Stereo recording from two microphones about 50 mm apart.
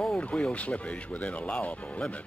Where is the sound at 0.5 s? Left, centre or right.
Left.